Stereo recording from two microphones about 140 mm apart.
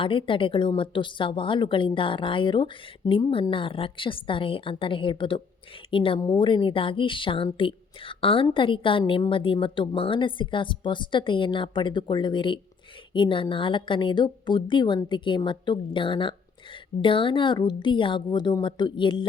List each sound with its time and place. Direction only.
0.0 s speech: 40° left (ahead or behind)